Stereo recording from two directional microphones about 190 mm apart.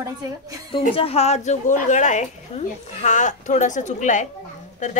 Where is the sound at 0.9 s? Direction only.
30° left (ahead or behind).